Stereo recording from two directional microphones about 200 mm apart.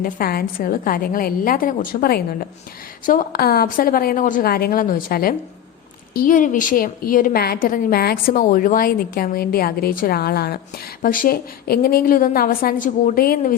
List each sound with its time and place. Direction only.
0.0 s a woman's voice: 45° left (ahead or behind)